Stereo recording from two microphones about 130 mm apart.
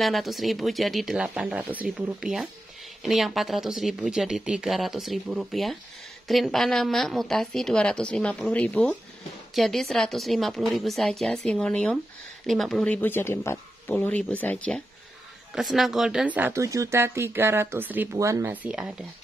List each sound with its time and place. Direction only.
0.0 s speech: centre (ahead or behind)
15.5 s speech: centre (ahead or behind); by 18.5 s 25° right (ahead or behind)
18.5 s speech: 10° right (ahead or behind)